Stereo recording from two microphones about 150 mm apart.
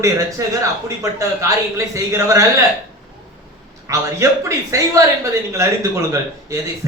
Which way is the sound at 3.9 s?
20° right (ahead or behind).